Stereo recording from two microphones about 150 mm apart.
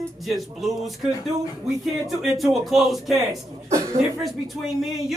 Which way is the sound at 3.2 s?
20° right (ahead or behind).